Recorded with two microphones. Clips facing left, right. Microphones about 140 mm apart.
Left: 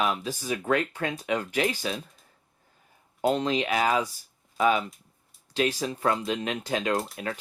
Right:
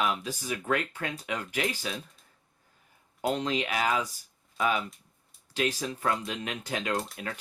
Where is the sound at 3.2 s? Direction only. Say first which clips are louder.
Left 4 dB; 30° left (ahead or behind).